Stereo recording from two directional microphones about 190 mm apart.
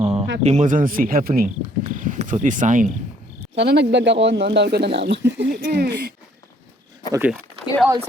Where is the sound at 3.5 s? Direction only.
65° right (ahead or behind).